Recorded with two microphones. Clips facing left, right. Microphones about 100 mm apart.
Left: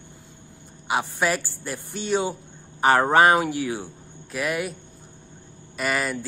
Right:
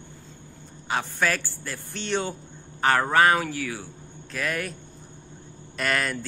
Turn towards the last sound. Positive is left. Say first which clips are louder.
# left 1 dB
turn(degrees=5)  # may be behind; listen again after turning